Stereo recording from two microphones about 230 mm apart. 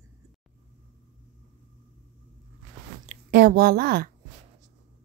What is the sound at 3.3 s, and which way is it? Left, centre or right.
Speech, right.